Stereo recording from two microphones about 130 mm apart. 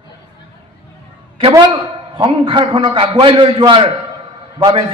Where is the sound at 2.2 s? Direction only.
40° right (ahead or behind).